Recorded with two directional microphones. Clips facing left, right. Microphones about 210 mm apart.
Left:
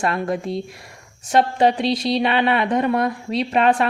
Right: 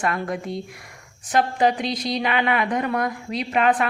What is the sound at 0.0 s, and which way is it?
Speech, 25° left (ahead or behind).